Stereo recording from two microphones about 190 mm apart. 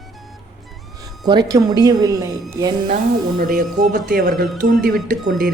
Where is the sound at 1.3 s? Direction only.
20° right (ahead or behind).